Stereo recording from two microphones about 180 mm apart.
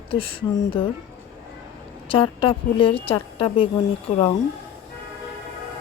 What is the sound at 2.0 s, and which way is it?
A woman's voice, 30° left (ahead or behind).